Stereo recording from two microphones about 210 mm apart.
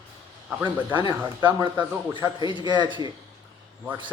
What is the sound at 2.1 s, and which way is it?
Speech, 20° right (ahead or behind).